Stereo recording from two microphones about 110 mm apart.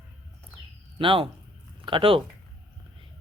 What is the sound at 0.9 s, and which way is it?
Speech, 55° right (ahead or behind).